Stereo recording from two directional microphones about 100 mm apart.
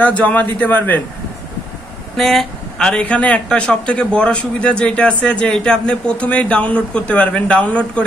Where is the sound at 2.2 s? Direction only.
5° left (ahead or behind).